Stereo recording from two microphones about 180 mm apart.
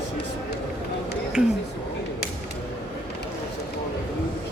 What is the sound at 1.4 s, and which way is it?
Speech, 5° right (ahead or behind).